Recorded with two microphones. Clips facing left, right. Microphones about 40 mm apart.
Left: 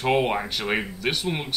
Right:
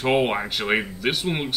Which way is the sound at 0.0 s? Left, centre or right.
Centre.